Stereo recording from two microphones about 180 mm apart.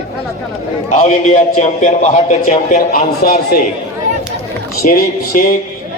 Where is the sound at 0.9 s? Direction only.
45° left (ahead or behind).